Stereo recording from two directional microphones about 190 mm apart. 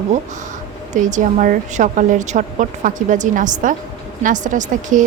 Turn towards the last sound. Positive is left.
turn(degrees=-40)  # may be behind; listen again after turning